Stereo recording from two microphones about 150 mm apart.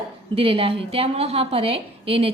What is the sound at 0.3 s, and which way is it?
A woman's voice, 35° right (ahead or behind).